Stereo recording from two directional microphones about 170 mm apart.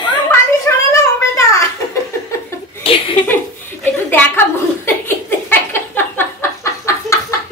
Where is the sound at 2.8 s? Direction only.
30° left (ahead or behind).